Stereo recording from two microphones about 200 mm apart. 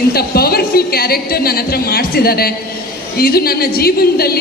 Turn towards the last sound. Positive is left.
turn(degrees=50)  # may be behind; listen again after turning